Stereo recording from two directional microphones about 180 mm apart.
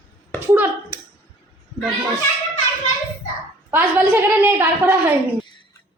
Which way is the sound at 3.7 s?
10° right (ahead or behind).